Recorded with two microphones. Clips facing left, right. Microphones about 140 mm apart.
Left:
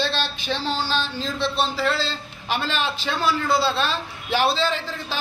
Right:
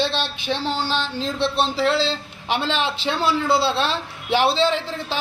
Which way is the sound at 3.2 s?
70° right (ahead or behind).